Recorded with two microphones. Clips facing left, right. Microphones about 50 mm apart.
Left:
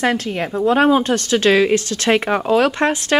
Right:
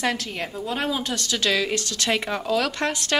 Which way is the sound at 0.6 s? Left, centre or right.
Left.